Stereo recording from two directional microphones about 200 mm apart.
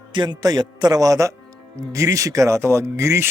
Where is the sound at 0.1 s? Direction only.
20° right (ahead or behind).